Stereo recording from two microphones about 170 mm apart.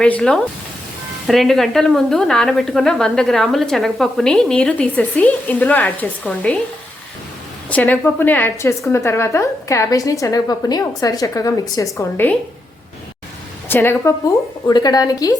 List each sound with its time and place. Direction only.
0.0 s speech: 5° left (ahead or behind)
7.7 s a woman's voice: 10° left (ahead or behind)
13.7 s a woman's voice: 15° left (ahead or behind)